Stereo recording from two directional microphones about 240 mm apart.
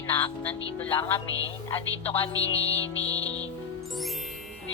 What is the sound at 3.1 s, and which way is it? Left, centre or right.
Speech, centre.